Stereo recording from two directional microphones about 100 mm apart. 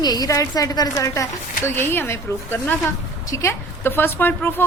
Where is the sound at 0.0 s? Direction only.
40° left (ahead or behind).